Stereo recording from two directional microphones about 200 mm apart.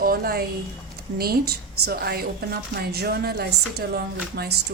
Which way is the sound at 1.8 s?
50° right (ahead or behind).